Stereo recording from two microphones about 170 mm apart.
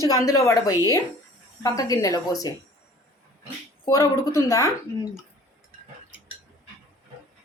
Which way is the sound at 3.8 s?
20° left (ahead or behind).